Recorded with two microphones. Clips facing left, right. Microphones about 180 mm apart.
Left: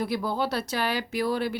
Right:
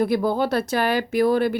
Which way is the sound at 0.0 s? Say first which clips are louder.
Right 7 dB; 50° right (ahead or behind).